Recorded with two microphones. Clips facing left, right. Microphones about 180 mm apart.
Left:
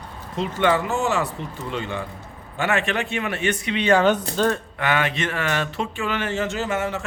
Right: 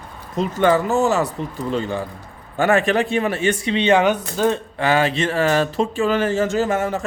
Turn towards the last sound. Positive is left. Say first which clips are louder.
# right 5 dB
turn(degrees=-40)  # may be behind; listen again after turning